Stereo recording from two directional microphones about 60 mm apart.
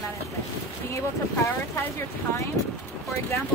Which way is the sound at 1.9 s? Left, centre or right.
Left.